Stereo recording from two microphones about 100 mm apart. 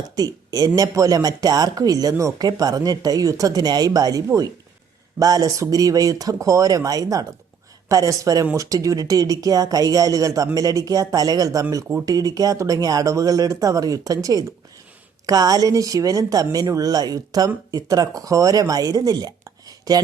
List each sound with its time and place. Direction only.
0.2 s speech: 40° right (ahead or behind)